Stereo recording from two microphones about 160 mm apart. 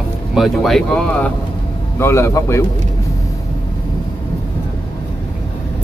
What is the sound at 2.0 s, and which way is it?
Speech, 15° left (ahead or behind).